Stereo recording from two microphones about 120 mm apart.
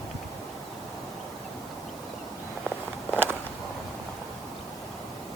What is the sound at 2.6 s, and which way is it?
Walk, 10° right (ahead or behind).